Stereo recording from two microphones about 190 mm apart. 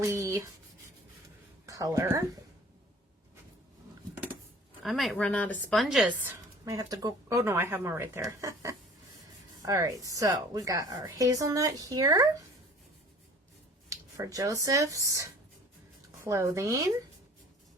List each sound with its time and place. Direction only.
0.0 s a woman's voice: 15° right (ahead or behind)
1.6 s speech: 20° right (ahead or behind)
4.1 s a sound: 10° right (ahead or behind)
4.8 s a woman's voice: centre (ahead or behind)
6.7 s a woman's voice: 20° right (ahead or behind)
13.9 s a woman's voice: 20° right (ahead or behind)